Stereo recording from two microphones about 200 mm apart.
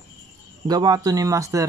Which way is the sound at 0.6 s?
20° right (ahead or behind).